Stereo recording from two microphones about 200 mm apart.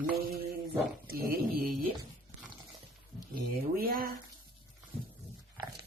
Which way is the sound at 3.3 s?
45° right (ahead or behind).